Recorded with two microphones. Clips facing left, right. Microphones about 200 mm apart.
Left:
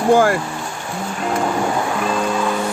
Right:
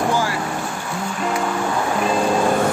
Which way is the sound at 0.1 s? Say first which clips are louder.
Left 8 dB; 55° left (ahead or behind).